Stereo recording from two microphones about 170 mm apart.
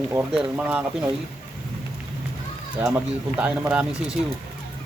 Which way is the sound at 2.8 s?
5° right (ahead or behind).